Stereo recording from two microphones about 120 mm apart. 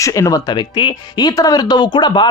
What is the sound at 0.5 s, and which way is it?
Speech, 40° left (ahead or behind).